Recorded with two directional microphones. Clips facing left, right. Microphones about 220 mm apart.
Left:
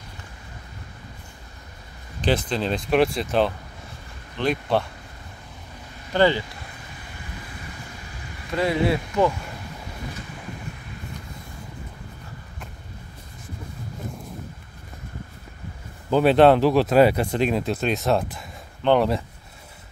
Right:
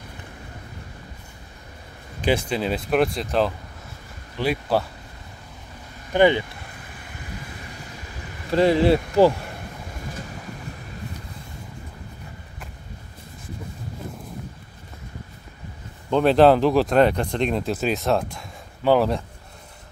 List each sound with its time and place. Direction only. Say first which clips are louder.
2.2 s speech: right 1 dB; 10° right (ahead or behind)
6.1 s speech: right 2 dB; 15° right (ahead or behind)
8.5 s speech: right 5 dB; 30° right (ahead or behind)
16.1 s speech: even; 5° left (ahead or behind)